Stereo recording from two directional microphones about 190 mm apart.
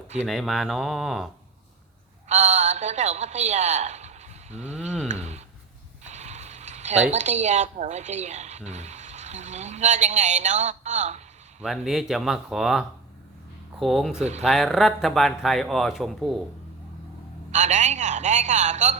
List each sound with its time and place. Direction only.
0.2 s speech: centre (ahead or behind)
2.3 s a woman's voice: 40° right (ahead or behind)
5.0 s a sound: 35° right (ahead or behind)
6.1 s vehicle: 35° right (ahead or behind)
7.1 s speech: 40° right (ahead or behind)
11.6 s speech: centre (ahead or behind)
17.5 s a woman's voice: 40° right (ahead or behind)